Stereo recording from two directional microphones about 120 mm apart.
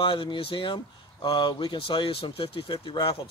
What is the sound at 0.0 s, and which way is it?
Speech, 45° left (ahead or behind).